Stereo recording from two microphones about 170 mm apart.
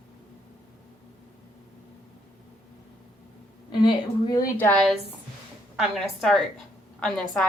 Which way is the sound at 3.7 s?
25° left (ahead or behind).